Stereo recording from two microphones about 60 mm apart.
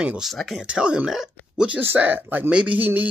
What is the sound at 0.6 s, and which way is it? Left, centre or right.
Speech, centre.